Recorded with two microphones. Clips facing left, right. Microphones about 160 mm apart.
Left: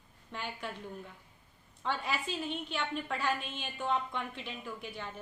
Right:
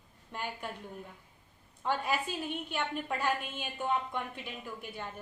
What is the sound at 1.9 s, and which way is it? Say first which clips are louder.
Speech: right 3 dB; 50° right (ahead or behind).